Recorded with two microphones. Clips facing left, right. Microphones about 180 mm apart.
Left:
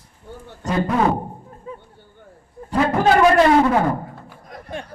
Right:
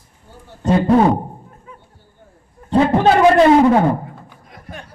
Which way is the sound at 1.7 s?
30° left (ahead or behind).